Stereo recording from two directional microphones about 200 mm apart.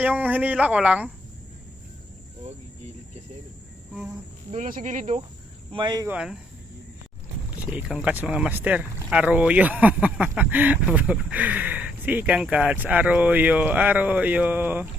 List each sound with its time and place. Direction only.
0.0 s speech: 10° right (ahead or behind)
4.5 s speech: 40° right (ahead or behind)
5.7 s speech: 20° right (ahead or behind)
6.1 s speech: 5° right (ahead or behind)
7.7 s speech: 5° right (ahead or behind)